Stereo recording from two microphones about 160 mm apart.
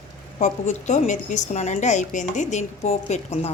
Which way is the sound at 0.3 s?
45° left (ahead or behind).